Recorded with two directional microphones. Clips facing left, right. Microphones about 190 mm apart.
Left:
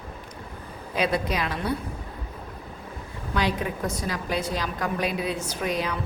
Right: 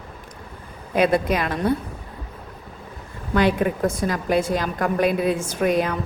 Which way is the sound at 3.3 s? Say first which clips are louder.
Right 7 dB; 55° right (ahead or behind).